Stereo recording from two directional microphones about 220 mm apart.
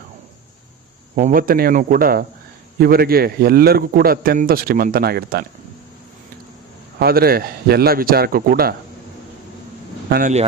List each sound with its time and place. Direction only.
1.1 s a man's voice: 40° right (ahead or behind)
7.0 s a man's voice: 45° right (ahead or behind)
10.1 s speech: 40° right (ahead or behind)